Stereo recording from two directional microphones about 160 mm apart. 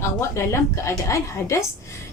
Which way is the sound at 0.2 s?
15° left (ahead or behind).